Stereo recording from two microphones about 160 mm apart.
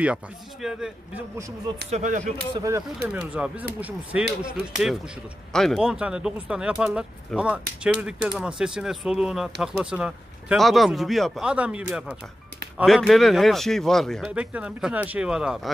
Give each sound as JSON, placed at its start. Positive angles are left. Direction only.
{"t": 0.0, "sound": "speech", "side_deg": -5}
{"t": 1.9, "sound": "speech", "side_deg": -50}
{"t": 2.5, "sound": "speech", "side_deg": -20}
{"t": 3.3, "sound": "speech", "side_deg": -5}
{"t": 5.5, "sound": "speech", "side_deg": 0}
{"t": 14.3, "sound": "speech", "side_deg": -10}